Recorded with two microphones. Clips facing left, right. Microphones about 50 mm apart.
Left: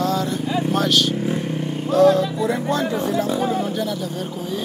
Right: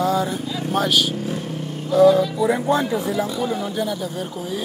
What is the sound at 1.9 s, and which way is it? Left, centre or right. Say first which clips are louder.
Speech: right 1 dB; centre.